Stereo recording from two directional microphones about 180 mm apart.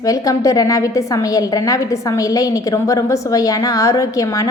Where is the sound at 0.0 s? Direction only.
20° left (ahead or behind).